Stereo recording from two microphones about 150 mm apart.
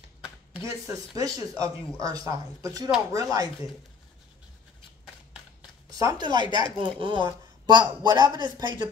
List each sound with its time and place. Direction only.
0.8 s speech: 20° right (ahead or behind)
5.9 s speech: 25° right (ahead or behind)